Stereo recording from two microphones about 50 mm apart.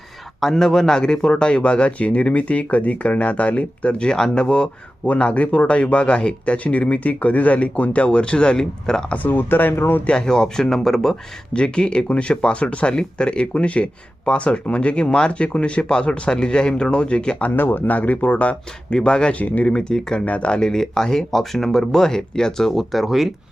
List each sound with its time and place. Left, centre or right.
0.3 s speech: centre
9.0 s speech: left
10.1 s speech: centre
11.5 s speech: centre
17.5 s speech: left; by 19.4 s centre
19.4 s speech: left
19.6 s speech: centre
20.2 s speech: left; by 23.3 s centre